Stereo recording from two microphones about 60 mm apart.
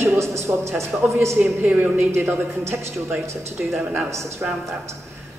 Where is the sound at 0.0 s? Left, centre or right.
Right.